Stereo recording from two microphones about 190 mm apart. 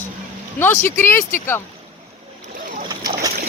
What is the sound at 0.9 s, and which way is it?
Speech, 10° left (ahead or behind).